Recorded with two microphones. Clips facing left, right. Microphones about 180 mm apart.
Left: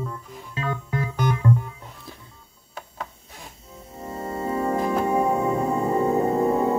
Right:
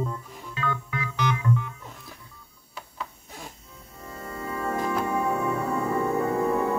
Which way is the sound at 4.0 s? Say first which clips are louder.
Left 7 dB; 25° left (ahead or behind).